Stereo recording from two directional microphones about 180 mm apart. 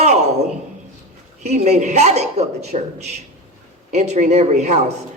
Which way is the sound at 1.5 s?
40° right (ahead or behind).